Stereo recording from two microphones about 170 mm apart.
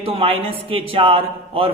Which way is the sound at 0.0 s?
35° right (ahead or behind).